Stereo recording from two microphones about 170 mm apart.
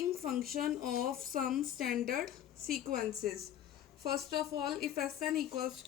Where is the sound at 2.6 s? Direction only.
60° right (ahead or behind).